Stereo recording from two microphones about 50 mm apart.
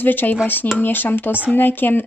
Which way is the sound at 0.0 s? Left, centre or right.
Left.